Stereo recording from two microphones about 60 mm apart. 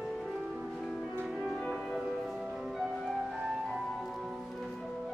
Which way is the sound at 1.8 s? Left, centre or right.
Centre.